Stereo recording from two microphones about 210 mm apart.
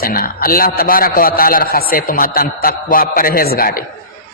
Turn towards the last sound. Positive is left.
turn(degrees=45)  # may be behind; listen again after turning